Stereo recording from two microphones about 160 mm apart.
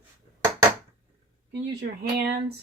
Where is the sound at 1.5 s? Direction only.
90° right.